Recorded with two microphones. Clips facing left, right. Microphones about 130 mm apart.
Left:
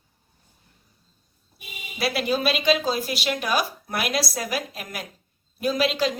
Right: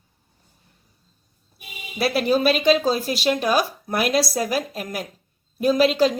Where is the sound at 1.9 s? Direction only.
40° right (ahead or behind).